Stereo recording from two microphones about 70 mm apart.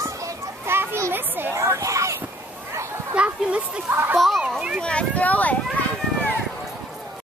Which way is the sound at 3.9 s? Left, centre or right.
Right.